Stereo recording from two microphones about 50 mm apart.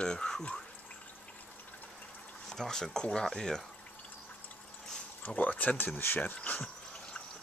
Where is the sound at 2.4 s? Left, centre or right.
Centre.